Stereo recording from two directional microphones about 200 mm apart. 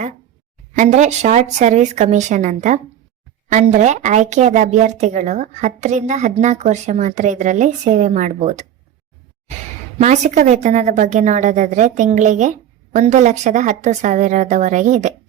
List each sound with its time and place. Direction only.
0.7 s speech: 40° right (ahead or behind)
10.0 s speech: 35° right (ahead or behind)